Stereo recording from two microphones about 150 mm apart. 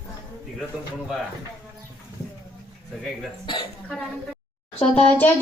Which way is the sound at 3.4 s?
35° left (ahead or behind).